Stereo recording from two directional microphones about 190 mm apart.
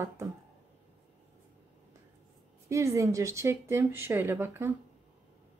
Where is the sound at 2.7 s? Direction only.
15° right (ahead or behind).